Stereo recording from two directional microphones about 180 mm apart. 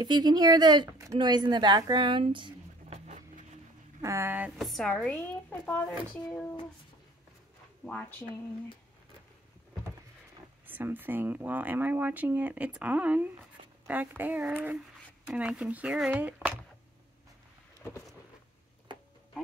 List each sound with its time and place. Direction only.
0.0 s speech: 25° right (ahead or behind)
3.1 s a sound: 40° right (ahead or behind)
4.0 s speech: 15° right (ahead or behind); by 6.5 s 5° left (ahead or behind)
7.8 s speech: 10° left (ahead or behind)
10.7 s speech: 10° right (ahead or behind)